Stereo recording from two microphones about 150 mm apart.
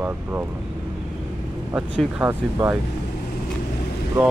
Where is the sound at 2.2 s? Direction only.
15° right (ahead or behind).